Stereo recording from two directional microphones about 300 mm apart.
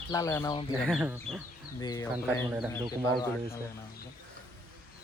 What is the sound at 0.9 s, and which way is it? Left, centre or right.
Speech, centre.